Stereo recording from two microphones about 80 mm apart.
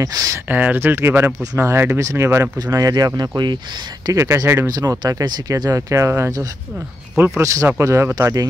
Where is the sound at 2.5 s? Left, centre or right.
Right.